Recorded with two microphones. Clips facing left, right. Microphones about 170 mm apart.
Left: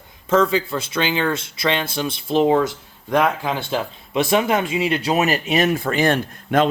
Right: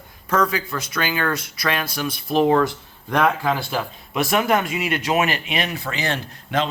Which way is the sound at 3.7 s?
25° left (ahead or behind).